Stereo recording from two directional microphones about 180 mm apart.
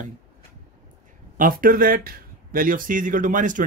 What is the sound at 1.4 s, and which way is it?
Speech, 50° right (ahead or behind).